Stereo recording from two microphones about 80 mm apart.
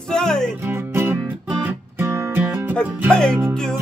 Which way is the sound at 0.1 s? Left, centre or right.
Centre.